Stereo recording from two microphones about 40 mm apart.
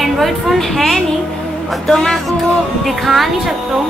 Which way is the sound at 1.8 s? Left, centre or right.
Centre.